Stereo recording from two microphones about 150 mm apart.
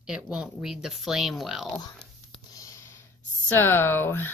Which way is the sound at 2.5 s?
20° left (ahead or behind).